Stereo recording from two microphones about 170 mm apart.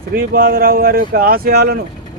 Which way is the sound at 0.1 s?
60° right (ahead or behind).